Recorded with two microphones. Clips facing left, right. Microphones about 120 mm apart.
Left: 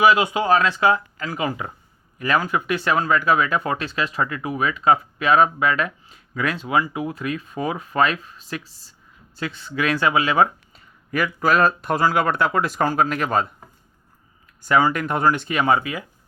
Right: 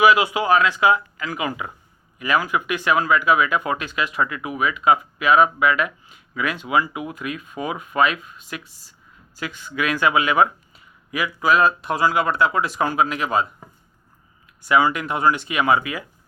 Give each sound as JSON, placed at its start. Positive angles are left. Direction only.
{"t": 0.0, "sound": "speech", "side_deg": 30}
{"t": 11.1, "sound": "speech", "side_deg": 45}
{"t": 14.6, "sound": "speech", "side_deg": 40}